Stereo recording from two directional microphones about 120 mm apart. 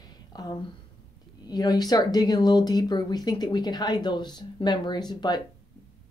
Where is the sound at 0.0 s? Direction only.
35° left (ahead or behind).